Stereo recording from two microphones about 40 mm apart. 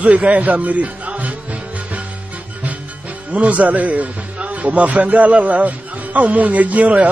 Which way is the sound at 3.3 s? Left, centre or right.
Right.